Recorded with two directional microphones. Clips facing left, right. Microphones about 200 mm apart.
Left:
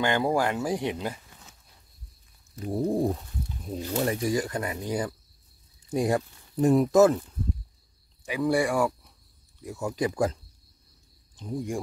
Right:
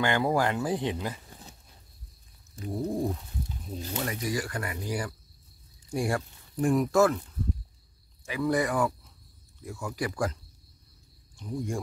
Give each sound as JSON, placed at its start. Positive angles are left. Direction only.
{"t": 0.0, "sound": "speech", "side_deg": 20}
{"t": 2.6, "sound": "a sound", "side_deg": 30}
{"t": 3.9, "sound": "speech", "side_deg": 30}
{"t": 8.2, "sound": "speech", "side_deg": 15}
{"t": 9.6, "sound": "speech", "side_deg": 20}
{"t": 11.5, "sound": "speech", "side_deg": 15}